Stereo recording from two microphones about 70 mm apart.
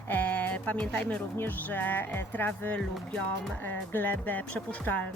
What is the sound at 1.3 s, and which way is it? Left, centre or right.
Speech, left.